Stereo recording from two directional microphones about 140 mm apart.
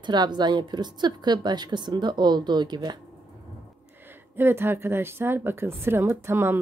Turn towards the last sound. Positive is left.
turn(degrees=-15)  # may be behind; listen again after turning